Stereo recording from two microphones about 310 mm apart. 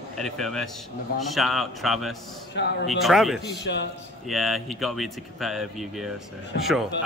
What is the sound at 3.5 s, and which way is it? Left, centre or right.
Speech, left.